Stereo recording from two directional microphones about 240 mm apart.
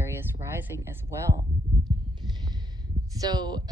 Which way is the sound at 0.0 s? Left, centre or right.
Centre.